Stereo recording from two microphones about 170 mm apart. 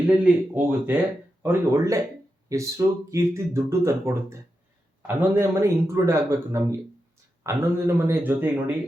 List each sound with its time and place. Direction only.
0.2 s speech: 10° right (ahead or behind)